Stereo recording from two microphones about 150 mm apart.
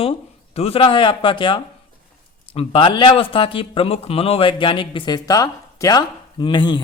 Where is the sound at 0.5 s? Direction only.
40° left (ahead or behind).